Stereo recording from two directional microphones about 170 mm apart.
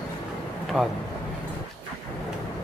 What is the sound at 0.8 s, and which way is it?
Speech, 5° right (ahead or behind).